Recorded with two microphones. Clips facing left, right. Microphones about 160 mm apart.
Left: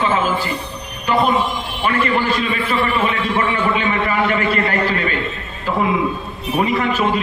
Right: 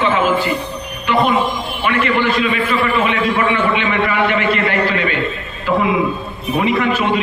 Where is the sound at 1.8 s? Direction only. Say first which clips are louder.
Right 1 dB; 35° left (ahead or behind).